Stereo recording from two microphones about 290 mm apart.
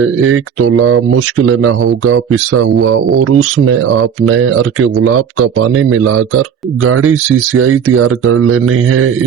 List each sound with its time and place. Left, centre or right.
0.2 s speech: right